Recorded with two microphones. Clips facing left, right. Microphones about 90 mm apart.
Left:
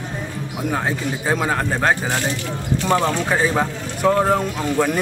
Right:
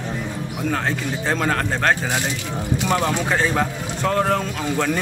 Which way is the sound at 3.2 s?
10° left (ahead or behind).